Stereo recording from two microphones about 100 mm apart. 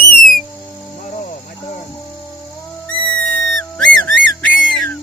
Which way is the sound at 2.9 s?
60° left (ahead or behind).